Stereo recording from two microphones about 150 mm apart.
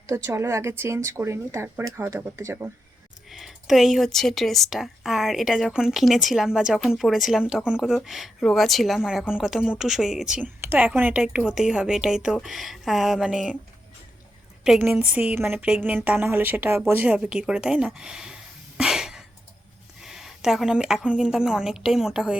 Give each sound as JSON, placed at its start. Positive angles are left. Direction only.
{"t": 0.1, "sound": "speech", "side_deg": -20}
{"t": 3.2, "sound": "speech", "side_deg": 0}
{"t": 14.6, "sound": "speech", "side_deg": -10}
{"t": 18.8, "sound": "a sound", "side_deg": -5}
{"t": 20.0, "sound": "a woman's voice", "side_deg": -5}